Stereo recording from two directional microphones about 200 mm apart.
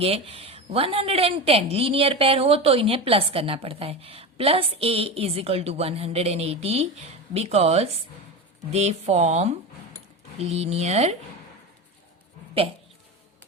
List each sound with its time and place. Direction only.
0.0 s a woman's voice: 30° right (ahead or behind)